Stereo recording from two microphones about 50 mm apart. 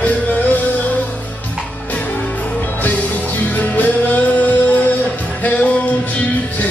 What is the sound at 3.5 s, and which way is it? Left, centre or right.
Music, left.